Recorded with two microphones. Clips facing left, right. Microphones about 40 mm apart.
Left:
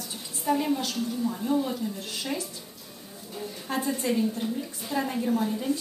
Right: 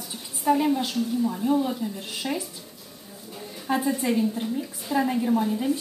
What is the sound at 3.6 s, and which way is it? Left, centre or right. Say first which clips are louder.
A woman's voice: right 4 dB; centre.